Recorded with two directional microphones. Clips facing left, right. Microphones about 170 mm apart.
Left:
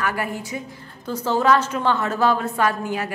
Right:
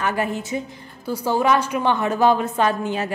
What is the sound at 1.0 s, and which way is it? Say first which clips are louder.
A woman's voice: even; 10° right (ahead or behind).